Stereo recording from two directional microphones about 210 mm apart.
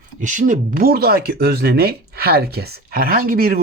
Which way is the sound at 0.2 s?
35° right (ahead or behind).